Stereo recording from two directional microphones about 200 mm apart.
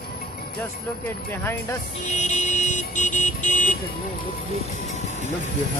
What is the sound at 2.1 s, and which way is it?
Vehicle, 35° left (ahead or behind).